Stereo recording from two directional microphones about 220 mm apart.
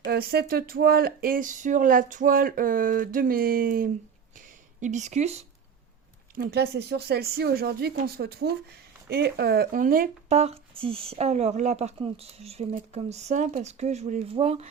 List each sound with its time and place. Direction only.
0.1 s speech: 45° right (ahead or behind)
4.4 s a sound: 35° right (ahead or behind)
6.3 s speech: 45° right (ahead or behind); by 14.7 s 25° right (ahead or behind)